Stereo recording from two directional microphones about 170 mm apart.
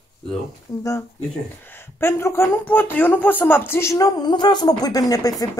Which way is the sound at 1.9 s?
15° left (ahead or behind).